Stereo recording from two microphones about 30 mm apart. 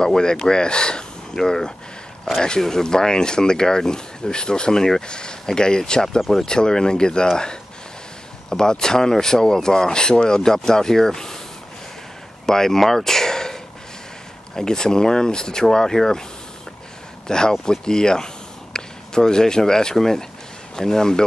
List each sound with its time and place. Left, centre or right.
0.0 s speech: left
8.5 s speech: left
12.4 s speech: centre
17.3 s speech: left